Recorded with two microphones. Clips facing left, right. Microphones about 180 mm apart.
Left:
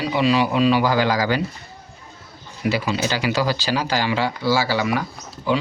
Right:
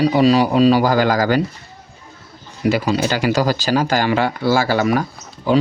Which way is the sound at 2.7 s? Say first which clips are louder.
Right 5 dB; 45° right (ahead or behind).